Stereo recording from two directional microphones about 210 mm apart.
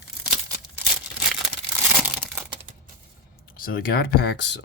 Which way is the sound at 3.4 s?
45° left (ahead or behind).